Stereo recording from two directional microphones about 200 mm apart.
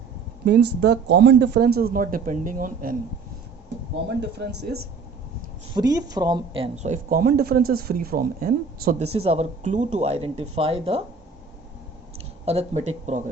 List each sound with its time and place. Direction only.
0.4 s speech: 60° right (ahead or behind)
4.2 s speech: 60° right (ahead or behind)
5.7 s speech: 20° right (ahead or behind); by 9.1 s 50° right (ahead or behind)
9.1 s speech: 30° right (ahead or behind)
12.5 s speech: 35° right (ahead or behind)